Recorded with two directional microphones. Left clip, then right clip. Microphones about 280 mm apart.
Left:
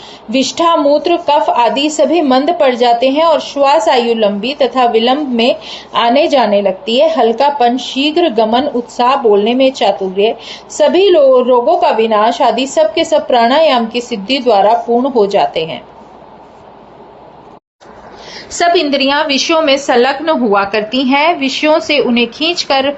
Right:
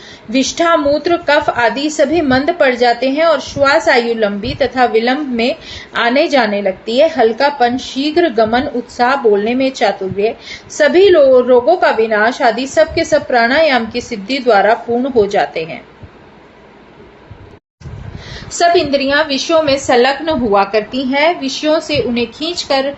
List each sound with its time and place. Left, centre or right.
0.3 s a woman's voice: centre
18.3 s a woman's voice: centre